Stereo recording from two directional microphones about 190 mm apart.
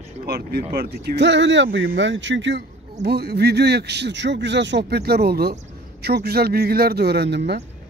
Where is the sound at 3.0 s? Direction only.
55° right (ahead or behind).